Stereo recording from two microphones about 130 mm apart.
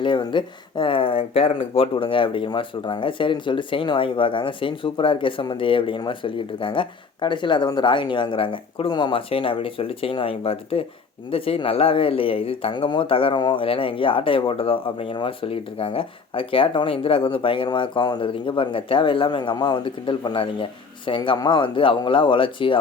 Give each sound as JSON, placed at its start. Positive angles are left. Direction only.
{"t": 0.0, "sound": "speech", "side_deg": 40}